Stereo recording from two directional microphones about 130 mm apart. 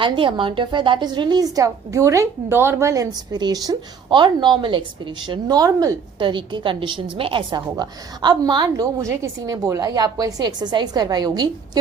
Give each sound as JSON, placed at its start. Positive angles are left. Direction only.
{"t": 0.0, "sound": "a woman's voice", "side_deg": -40}
{"t": 6.2, "sound": "a woman's voice", "side_deg": -40}